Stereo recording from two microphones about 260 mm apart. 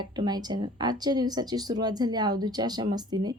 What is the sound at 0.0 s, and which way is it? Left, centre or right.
Speech, centre.